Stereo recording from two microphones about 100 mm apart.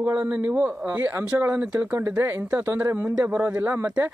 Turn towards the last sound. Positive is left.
turn(degrees=-20)  # may be behind; listen again after turning